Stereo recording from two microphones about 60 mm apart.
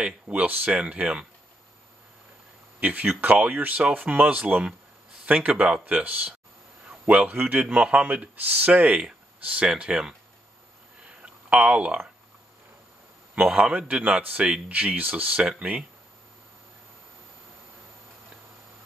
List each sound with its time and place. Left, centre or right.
0.0 s a man's voice: right
2.8 s a man's voice: right
11.1 s a sound: right
13.3 s a man's voice: right